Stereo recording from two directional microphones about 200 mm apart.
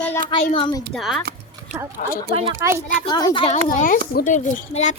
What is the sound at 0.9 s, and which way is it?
Speech, centre (ahead or behind).